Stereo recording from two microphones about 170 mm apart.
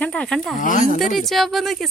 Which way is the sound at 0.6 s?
50° left (ahead or behind).